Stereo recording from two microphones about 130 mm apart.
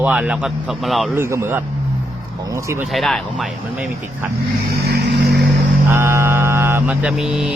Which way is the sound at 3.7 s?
15° right (ahead or behind).